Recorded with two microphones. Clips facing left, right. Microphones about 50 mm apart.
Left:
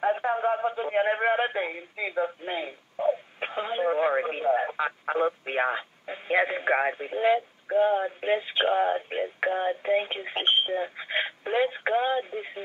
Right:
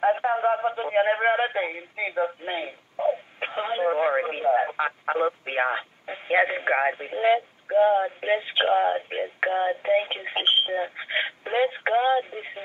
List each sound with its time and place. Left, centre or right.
0.0 s speech: centre